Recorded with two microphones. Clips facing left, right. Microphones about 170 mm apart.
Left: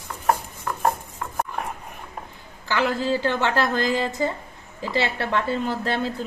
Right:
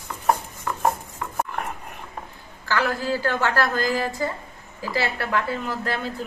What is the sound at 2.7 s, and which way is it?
A woman's voice, 20° left (ahead or behind).